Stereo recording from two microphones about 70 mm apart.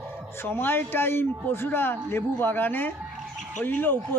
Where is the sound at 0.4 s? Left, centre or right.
Left.